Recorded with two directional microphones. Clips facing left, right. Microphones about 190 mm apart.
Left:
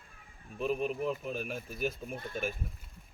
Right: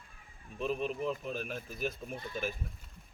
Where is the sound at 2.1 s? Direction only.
50° left (ahead or behind).